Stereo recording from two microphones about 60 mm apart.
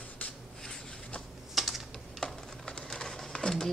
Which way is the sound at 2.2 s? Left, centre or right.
Centre.